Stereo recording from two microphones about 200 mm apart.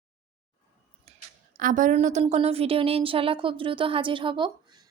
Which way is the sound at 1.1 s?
30° right (ahead or behind).